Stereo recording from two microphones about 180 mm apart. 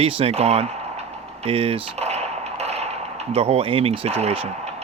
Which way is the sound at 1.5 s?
35° right (ahead or behind).